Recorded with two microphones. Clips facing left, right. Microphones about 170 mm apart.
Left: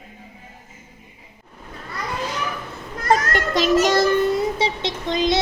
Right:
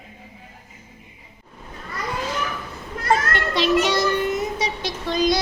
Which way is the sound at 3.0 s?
45° left (ahead or behind).